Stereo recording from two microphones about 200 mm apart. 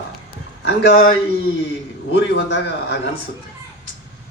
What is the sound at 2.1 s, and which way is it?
Speech, 60° left (ahead or behind).